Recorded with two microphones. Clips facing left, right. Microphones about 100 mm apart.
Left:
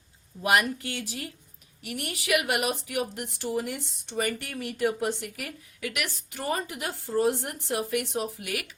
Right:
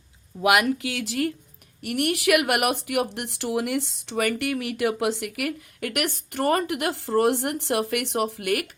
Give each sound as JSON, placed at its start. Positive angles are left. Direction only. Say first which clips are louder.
{"t": 0.4, "sound": "speech", "louder": "right 4 dB", "side_deg": -90}
{"t": 1.8, "sound": "speech", "louder": "right 11 dB", "side_deg": -60}